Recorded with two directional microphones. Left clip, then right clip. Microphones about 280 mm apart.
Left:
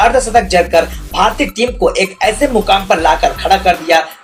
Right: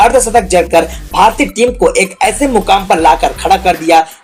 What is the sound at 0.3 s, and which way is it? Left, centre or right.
Speech, right.